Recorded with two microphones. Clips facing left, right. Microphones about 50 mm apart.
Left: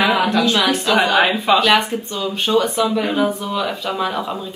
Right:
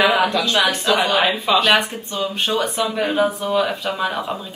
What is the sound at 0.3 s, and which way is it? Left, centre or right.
Speech, left.